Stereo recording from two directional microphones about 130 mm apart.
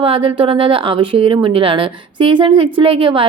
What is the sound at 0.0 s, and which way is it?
Speech, 45° right (ahead or behind).